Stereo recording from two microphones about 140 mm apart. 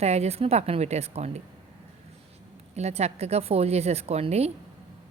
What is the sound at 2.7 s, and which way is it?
Speech, 50° right (ahead or behind).